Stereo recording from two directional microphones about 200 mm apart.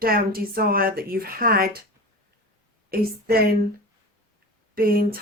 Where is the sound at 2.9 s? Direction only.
50° right (ahead or behind).